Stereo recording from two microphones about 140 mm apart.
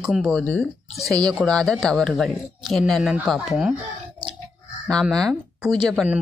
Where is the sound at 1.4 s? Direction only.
5° left (ahead or behind).